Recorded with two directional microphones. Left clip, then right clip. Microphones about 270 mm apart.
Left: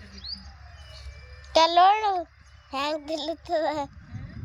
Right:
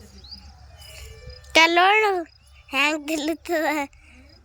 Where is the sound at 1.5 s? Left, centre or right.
Centre.